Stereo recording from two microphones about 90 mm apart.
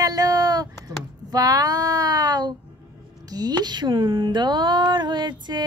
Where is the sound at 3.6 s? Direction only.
55° right (ahead or behind).